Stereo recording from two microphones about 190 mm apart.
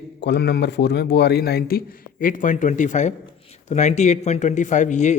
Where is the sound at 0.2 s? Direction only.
65° left (ahead or behind).